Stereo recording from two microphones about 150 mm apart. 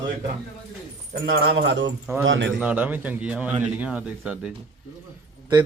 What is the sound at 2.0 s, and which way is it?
A man's voice, 10° right (ahead or behind).